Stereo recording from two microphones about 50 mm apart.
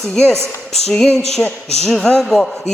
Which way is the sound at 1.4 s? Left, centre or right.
Left.